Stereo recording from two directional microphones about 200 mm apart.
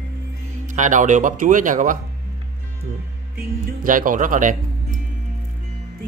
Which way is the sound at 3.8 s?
40° right (ahead or behind).